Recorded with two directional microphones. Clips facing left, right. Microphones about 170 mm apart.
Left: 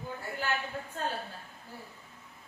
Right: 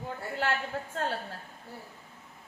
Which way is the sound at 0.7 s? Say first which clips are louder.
Right 3 dB; 80° right.